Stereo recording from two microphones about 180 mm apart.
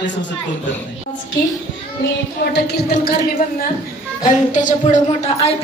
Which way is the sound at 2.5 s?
70° left (ahead or behind).